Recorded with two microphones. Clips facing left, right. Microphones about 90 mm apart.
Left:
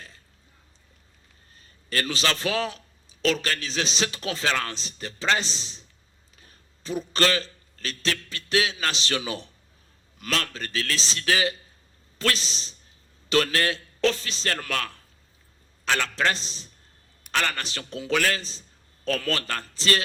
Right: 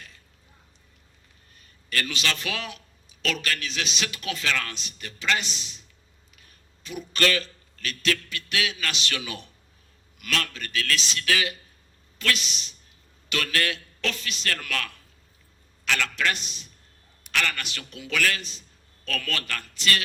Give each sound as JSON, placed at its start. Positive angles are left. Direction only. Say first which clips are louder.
{"t": 1.5, "sound": "a man's voice", "louder": "left 1 dB", "side_deg": 30}